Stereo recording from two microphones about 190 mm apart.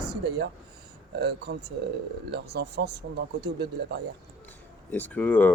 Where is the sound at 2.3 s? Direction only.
60° right (ahead or behind).